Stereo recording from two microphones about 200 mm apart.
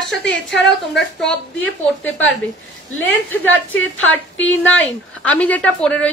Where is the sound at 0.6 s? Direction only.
Centre (ahead or behind).